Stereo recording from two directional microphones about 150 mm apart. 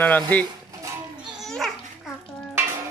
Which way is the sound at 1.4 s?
Centre (ahead or behind).